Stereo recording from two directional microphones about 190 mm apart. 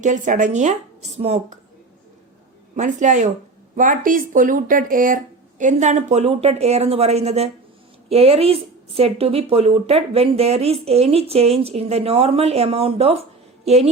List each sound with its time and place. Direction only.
0.0 s speech: 40° right (ahead or behind)
2.7 s speech: 40° right (ahead or behind)